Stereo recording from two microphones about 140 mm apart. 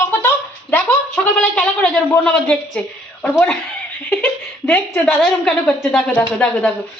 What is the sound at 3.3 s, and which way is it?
Speech, 10° left (ahead or behind).